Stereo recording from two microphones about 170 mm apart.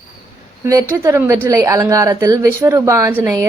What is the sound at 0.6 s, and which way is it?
A woman's voice, 20° right (ahead or behind).